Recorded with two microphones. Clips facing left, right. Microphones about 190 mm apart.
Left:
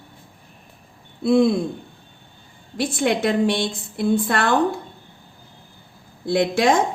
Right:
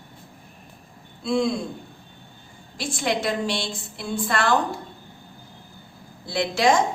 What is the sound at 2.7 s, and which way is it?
A woman's voice, 55° left (ahead or behind).